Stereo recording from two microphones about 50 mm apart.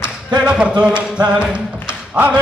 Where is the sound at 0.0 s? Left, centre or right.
Right.